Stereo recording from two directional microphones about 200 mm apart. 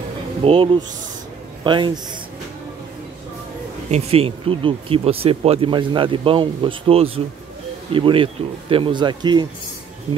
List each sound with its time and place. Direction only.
0.4 s a man's voice: 25° right (ahead or behind)
3.9 s speech: 30° right (ahead or behind)